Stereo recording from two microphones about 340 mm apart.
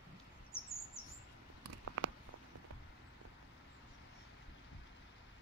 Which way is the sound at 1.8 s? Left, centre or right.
Right.